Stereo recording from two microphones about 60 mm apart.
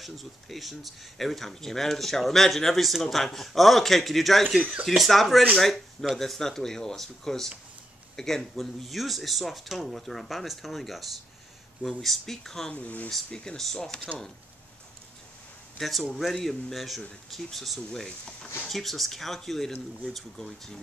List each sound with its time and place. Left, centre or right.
0.0 s speech: centre
12.7 s speech: left
13.1 s speech: centre
15.8 s speech: centre